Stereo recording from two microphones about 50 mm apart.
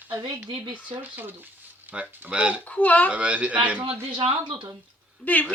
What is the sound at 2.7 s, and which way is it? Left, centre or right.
Speech, left.